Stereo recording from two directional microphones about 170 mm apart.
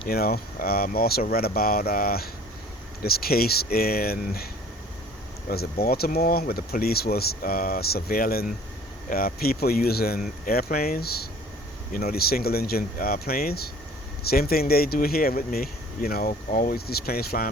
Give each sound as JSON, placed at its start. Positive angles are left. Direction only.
{"t": 0.1, "sound": "speech", "side_deg": 60}
{"t": 5.5, "sound": "speech", "side_deg": 60}